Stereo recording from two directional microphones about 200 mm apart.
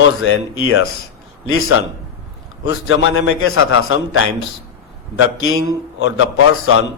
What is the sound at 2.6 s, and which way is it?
A man's voice, 85° left.